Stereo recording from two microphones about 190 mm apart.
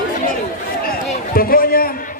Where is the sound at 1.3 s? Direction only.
50° left (ahead or behind).